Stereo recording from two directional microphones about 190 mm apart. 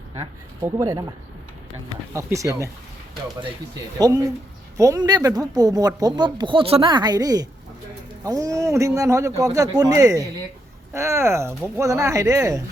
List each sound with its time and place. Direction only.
0.6 s speech: 15° right (ahead or behind)
2.1 s a man's voice: 15° right (ahead or behind)
3.9 s a man's voice: 20° right (ahead or behind)